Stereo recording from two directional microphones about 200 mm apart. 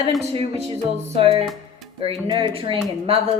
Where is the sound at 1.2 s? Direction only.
30° right (ahead or behind).